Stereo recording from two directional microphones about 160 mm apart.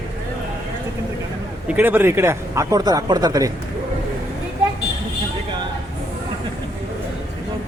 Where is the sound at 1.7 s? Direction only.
10° right (ahead or behind).